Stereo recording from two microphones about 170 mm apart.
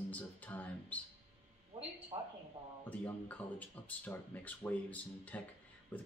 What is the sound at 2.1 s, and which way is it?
Speech, 35° right (ahead or behind).